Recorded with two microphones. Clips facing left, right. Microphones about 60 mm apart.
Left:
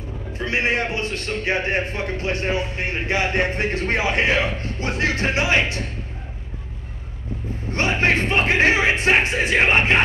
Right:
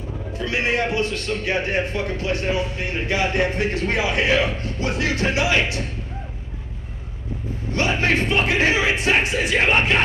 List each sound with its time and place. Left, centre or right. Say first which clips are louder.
0.4 s a man's voice: even; left
7.7 s a man's voice: left 1 dB; left